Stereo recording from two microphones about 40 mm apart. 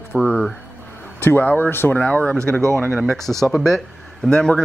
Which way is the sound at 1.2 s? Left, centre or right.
Left.